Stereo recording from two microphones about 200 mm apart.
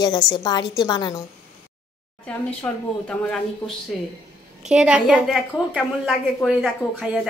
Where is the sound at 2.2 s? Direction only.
5° left (ahead or behind).